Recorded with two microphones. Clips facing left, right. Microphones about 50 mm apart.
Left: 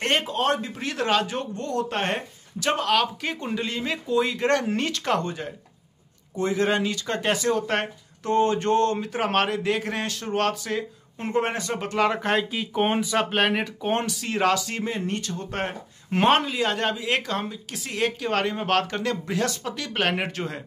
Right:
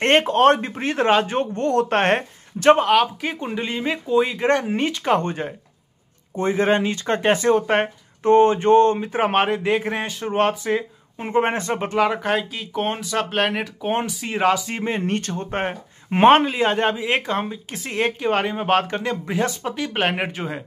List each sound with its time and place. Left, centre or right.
0.0 s speech: right
2.8 s speech: centre
5.2 s speech: right
11.9 s speech: centre
14.9 s speech: right
15.5 s speech: right